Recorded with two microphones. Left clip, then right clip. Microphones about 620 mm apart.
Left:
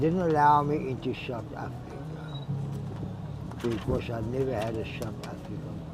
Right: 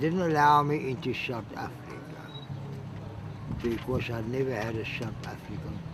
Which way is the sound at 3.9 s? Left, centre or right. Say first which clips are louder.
Left 1 dB; left.